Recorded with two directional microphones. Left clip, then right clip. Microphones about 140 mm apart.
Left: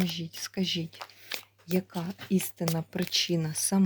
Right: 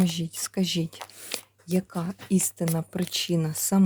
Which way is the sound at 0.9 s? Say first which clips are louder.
Right 2 dB; 50° right (ahead or behind).